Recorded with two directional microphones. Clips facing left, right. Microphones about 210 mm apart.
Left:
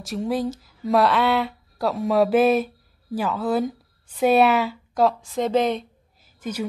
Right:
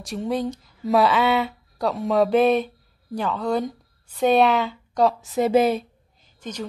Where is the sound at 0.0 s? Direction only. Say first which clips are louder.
Left 1 dB; centre (ahead or behind).